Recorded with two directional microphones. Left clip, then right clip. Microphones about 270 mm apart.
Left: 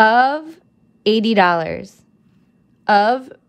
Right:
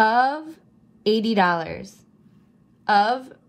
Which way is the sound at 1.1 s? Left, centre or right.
Left.